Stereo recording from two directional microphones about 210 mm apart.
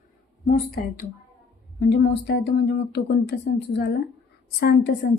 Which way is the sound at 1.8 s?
50° left (ahead or behind).